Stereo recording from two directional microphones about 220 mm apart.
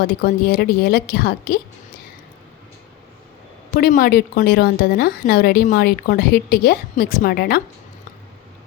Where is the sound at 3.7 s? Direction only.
40° left (ahead or behind).